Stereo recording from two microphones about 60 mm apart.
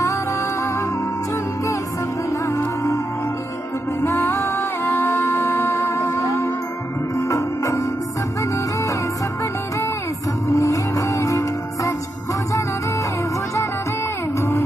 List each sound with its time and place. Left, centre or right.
2.4 s music: left
4.3 s music: left
10.5 s music: left